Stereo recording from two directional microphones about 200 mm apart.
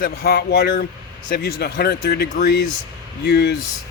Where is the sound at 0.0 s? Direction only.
50° left (ahead or behind).